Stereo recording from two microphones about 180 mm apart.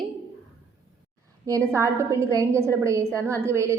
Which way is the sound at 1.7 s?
15° right (ahead or behind).